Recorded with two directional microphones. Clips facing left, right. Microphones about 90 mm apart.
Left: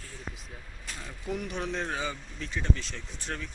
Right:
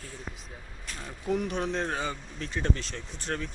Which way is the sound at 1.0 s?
35° right (ahead or behind).